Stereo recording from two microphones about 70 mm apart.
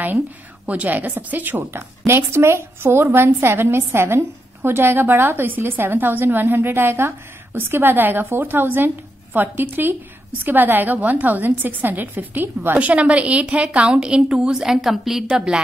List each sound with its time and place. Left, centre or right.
0.7 s a woman's voice: right